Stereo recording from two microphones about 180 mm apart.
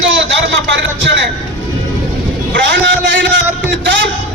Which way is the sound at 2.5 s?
90° right.